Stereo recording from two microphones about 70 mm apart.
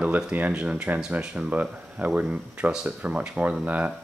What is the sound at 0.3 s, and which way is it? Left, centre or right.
Speech, right.